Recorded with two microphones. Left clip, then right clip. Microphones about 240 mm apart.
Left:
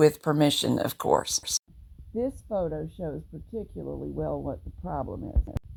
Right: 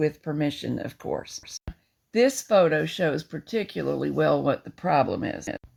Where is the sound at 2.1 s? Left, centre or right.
Centre.